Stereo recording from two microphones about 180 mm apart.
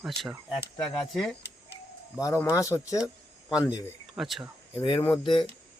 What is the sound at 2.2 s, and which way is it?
Speech, 15° left (ahead or behind).